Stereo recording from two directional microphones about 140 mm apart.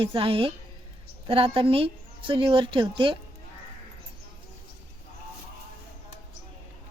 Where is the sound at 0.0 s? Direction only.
40° right (ahead or behind).